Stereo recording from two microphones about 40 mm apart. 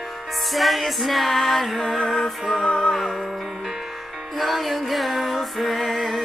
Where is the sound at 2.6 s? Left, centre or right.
Left.